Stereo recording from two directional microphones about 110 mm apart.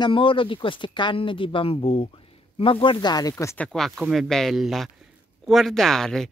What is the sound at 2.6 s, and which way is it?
Speech, 50° left (ahead or behind).